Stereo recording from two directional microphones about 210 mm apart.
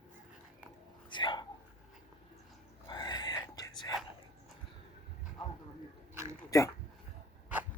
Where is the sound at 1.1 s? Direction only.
20° left (ahead or behind).